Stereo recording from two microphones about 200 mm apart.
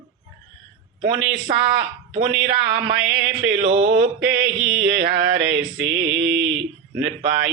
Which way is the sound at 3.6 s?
35° right (ahead or behind).